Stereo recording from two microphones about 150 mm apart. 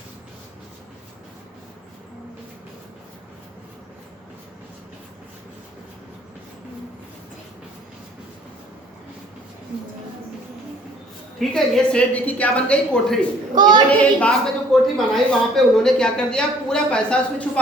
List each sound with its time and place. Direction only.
11.3 s a woman's voice: centre (ahead or behind)
13.6 s a woman's voice: 30° right (ahead or behind)
14.0 s speech: 5° left (ahead or behind)